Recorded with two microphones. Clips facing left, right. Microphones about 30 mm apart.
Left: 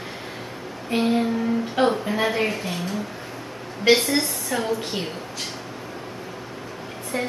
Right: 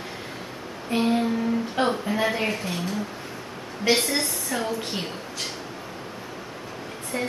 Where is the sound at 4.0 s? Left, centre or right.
Centre.